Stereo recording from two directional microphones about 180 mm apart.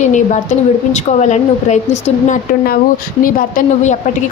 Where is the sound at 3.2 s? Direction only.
50° left (ahead or behind).